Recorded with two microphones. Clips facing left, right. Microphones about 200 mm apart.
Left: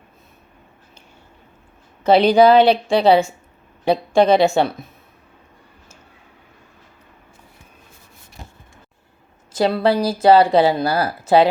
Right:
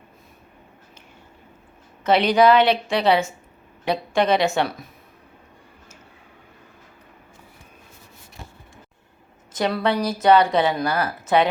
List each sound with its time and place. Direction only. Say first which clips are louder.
2.0 s a woman's voice: left 4 dB; 30° left (ahead or behind)
9.5 s speech: left 5 dB; 30° left (ahead or behind)